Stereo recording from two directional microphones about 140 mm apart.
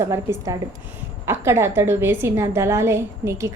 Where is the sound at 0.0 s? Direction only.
20° right (ahead or behind).